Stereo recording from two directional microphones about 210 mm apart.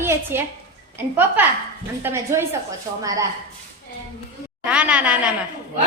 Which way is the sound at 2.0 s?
10° right (ahead or behind).